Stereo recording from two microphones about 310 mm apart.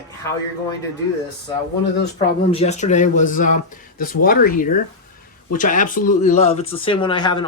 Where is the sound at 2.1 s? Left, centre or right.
Centre.